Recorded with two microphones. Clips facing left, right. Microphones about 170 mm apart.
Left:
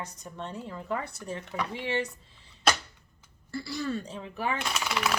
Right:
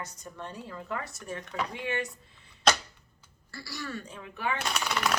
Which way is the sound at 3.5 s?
25° left (ahead or behind).